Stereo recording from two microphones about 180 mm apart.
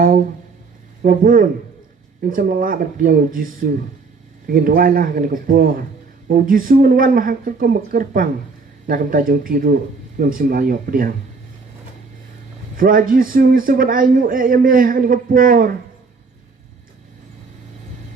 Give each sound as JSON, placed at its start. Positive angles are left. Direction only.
{"t": 1.0, "sound": "a man's voice", "side_deg": -50}
{"t": 12.7, "sound": "a man's voice", "side_deg": -50}